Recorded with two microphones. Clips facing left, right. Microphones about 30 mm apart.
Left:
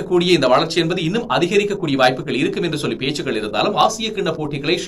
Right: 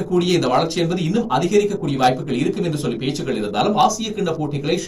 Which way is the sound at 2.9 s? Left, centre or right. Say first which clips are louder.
Left 1 dB; left.